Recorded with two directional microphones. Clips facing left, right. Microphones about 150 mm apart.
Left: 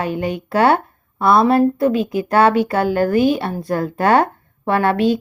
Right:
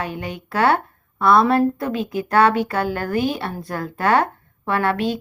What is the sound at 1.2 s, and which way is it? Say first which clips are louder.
A woman's voice: left 2 dB; 10° left (ahead or behind).